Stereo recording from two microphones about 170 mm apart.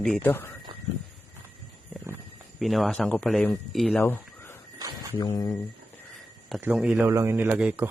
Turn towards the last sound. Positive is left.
turn(degrees=-10)  # may be behind; listen again after turning